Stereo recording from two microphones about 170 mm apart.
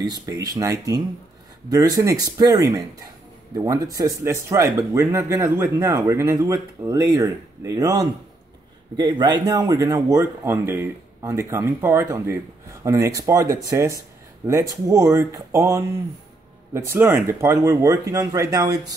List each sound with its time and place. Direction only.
0.0 s speech: 20° right (ahead or behind)